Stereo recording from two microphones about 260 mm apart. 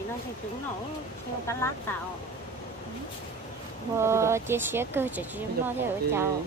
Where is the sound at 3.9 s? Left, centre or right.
Centre.